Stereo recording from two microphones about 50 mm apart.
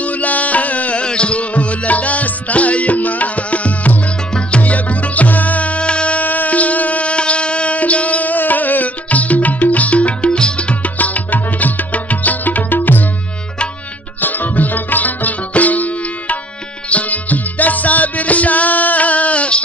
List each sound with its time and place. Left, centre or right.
0.0 s music: left
14.2 s sitar: left
16.9 s music: left